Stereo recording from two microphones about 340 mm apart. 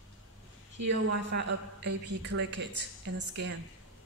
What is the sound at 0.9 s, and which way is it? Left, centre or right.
A man's voice, right.